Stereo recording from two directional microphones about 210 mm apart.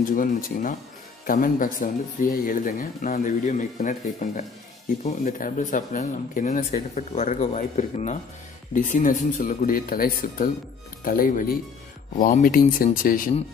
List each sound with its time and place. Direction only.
0.0 s speech: 40° left (ahead or behind)